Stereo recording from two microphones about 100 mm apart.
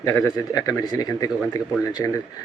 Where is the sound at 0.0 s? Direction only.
35° left (ahead or behind).